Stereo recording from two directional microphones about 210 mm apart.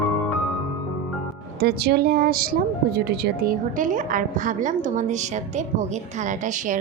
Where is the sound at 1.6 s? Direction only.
50° right (ahead or behind).